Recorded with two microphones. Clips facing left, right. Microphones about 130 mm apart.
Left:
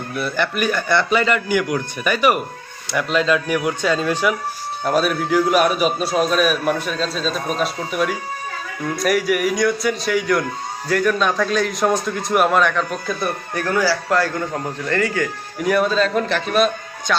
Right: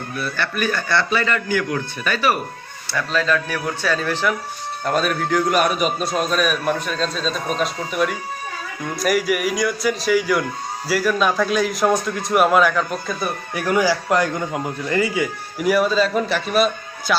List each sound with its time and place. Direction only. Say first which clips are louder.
0.2 s a man's voice: left 3 dB; 15° left (ahead or behind); by 13.3 s centre (ahead or behind)
13.5 s a man's voice: right 2 dB; 15° right (ahead or behind)